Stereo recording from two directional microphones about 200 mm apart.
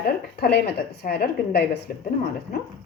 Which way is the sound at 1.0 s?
50° left (ahead or behind).